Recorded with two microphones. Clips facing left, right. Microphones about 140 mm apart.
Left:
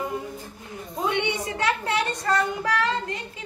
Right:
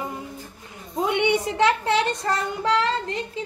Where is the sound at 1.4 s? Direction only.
25° right (ahead or behind).